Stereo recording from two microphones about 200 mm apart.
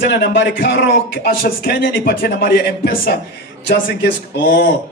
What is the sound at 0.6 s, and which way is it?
Speech, 45° left (ahead or behind).